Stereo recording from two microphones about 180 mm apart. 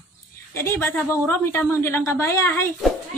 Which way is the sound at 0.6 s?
10° left (ahead or behind).